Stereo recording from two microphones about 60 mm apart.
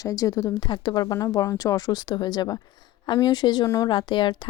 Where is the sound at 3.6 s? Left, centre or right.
Left.